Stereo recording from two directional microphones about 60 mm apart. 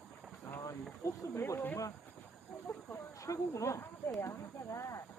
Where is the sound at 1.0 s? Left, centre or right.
Left.